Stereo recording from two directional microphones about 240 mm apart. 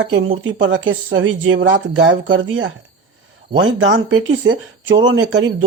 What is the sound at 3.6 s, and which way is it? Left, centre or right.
Speech, right.